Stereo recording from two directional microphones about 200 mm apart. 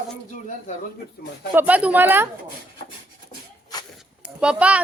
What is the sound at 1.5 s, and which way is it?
Speech, 10° right (ahead or behind).